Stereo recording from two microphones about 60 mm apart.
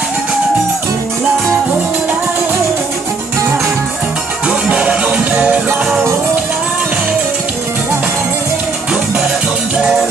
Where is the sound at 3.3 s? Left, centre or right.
Right.